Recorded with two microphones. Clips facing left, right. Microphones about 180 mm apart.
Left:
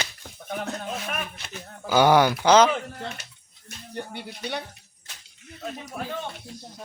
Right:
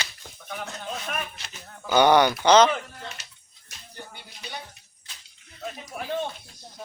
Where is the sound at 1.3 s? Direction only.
55° left (ahead or behind).